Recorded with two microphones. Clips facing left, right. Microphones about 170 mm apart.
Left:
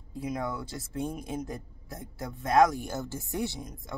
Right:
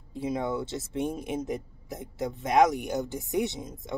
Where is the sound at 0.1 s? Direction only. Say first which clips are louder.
Right 4 dB; 25° right (ahead or behind).